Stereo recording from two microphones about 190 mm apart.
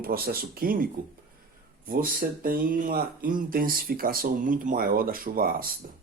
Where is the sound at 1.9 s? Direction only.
50° right (ahead or behind).